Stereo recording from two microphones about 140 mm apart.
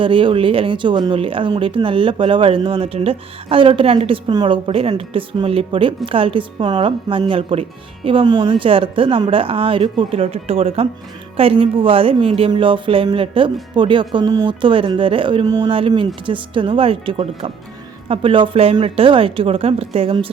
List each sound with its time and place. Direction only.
0.0 s speech: 35° right (ahead or behind)